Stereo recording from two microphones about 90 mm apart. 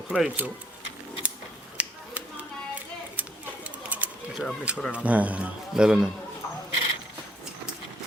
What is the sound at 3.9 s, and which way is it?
Bird, 15° right (ahead or behind).